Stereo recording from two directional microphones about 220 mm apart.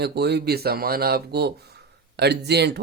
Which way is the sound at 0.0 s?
50° right (ahead or behind).